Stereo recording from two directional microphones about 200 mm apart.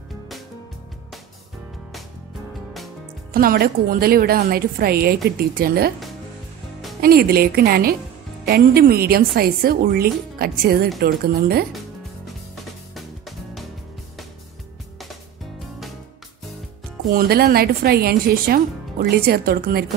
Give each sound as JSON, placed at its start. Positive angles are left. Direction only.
{"t": 3.3, "sound": "speech", "side_deg": -50}
{"t": 7.0, "sound": "speech", "side_deg": -50}
{"t": 12.9, "sound": "music", "side_deg": 0}
{"t": 17.1, "sound": "speech", "side_deg": -50}